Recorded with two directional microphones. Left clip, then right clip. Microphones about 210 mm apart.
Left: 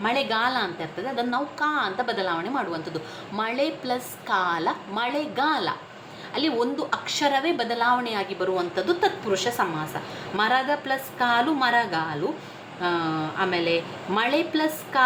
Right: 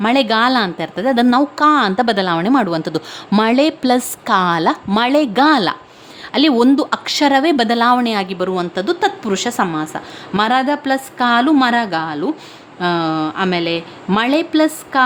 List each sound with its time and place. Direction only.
0.0 s a woman's voice: 55° right (ahead or behind)